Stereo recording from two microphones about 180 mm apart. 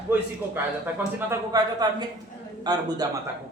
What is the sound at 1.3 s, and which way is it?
Speech, 20° right (ahead or behind).